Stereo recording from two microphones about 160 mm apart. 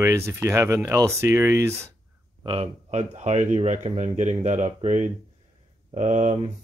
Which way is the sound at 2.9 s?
45° right (ahead or behind).